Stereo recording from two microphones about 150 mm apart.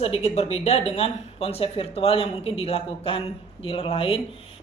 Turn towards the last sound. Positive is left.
turn(degrees=40)  # may be behind; listen again after turning